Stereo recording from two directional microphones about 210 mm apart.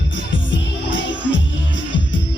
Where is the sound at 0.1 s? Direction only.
60° left (ahead or behind).